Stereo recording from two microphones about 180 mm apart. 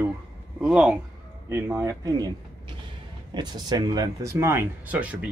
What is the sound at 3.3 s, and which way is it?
Speech, 25° right (ahead or behind).